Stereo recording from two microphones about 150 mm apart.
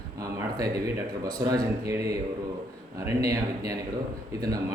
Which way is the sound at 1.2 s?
20° right (ahead or behind).